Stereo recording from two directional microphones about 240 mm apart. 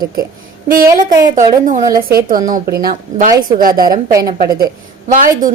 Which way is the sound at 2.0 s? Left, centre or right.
Right.